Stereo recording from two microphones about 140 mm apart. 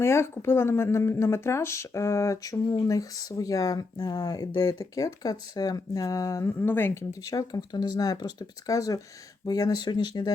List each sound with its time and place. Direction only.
0.0 s speech: 20° left (ahead or behind)